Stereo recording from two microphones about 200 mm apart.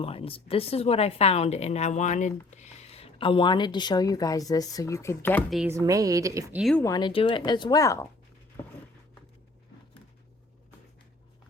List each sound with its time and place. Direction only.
0.0 s a woman's voice: 30° left (ahead or behind); by 5.4 s 10° left (ahead or behind)
5.5 s speech: centre (ahead or behind)
5.7 s a woman's voice: 15° right (ahead or behind)
6.6 s speech: centre (ahead or behind)
6.8 s a woman's voice: 20° left (ahead or behind)